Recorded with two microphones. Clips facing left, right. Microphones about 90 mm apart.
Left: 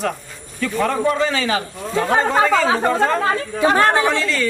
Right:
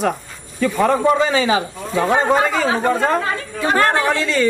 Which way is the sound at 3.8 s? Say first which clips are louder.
Right 3 dB; 20° left (ahead or behind).